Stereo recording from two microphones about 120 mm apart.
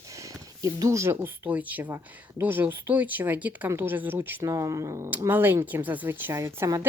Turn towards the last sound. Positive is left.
turn(degrees=-20)  # may be behind; listen again after turning